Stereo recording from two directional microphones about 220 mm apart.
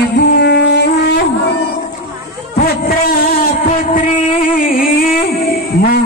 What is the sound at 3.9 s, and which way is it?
Music, 35° left (ahead or behind).